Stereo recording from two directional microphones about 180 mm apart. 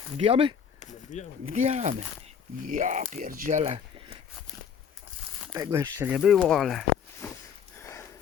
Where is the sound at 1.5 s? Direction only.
40° right (ahead or behind).